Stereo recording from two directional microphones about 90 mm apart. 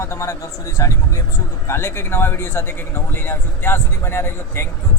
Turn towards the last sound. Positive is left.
turn(degrees=30)  # may be behind; listen again after turning